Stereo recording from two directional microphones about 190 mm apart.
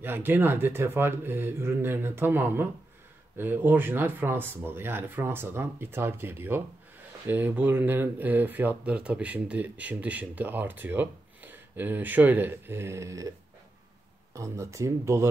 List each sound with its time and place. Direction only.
0.0 s speech: 10° right (ahead or behind)
14.3 s speech: 15° right (ahead or behind)